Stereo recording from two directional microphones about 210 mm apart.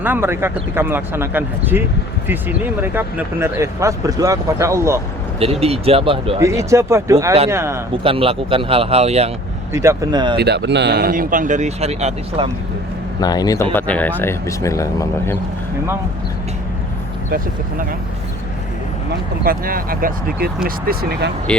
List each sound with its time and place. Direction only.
0.0 s speech: 10° right (ahead or behind)
5.4 s speech: 30° right (ahead or behind)
6.4 s speech: 15° right (ahead or behind)
8.0 s speech: 25° right (ahead or behind)
9.7 s speech: 15° right (ahead or behind)
10.3 s speech: 50° right (ahead or behind); by 12.5 s 30° right (ahead or behind)
13.1 s speech: 20° left (ahead or behind)
13.7 s speech: 5° left (ahead or behind)
19.5 s speech: 45° right (ahead or behind)